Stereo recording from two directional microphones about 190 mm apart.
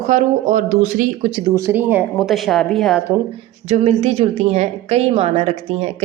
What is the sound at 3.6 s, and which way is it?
Speech, 35° right (ahead or behind).